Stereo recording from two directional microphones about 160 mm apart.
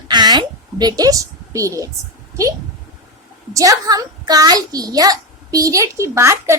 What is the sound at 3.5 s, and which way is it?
A child's voice, 20° right (ahead or behind).